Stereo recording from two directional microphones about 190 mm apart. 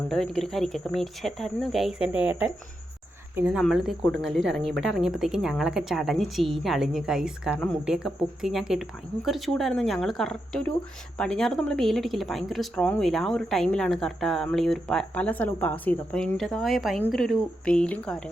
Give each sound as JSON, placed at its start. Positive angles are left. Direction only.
{"t": 0.1, "sound": "speech", "side_deg": 0}